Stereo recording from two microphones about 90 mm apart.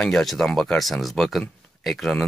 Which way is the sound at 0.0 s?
5° left (ahead or behind).